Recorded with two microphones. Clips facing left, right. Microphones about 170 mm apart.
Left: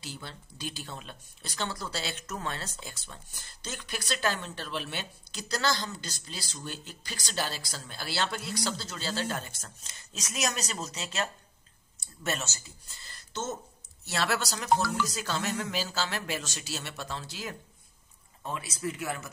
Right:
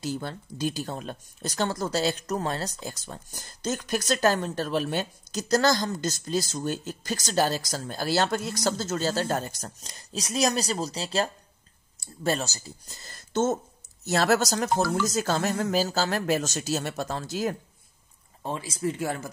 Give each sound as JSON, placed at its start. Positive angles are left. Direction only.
{"t": 0.0, "sound": "speech", "side_deg": -45}
{"t": 18.4, "sound": "speech", "side_deg": -30}